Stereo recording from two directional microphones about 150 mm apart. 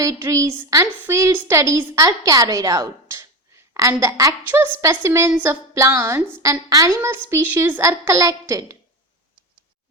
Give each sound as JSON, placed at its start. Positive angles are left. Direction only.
{"t": 0.0, "sound": "a woman's voice", "side_deg": -20}